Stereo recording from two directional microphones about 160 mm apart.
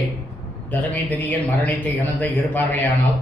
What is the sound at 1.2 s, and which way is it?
A man's voice, 10° left (ahead or behind).